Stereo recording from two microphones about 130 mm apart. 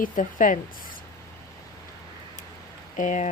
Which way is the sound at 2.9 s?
75° left (ahead or behind).